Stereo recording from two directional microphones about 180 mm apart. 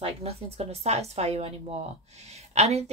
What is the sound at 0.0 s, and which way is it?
A woman's voice, 35° right (ahead or behind).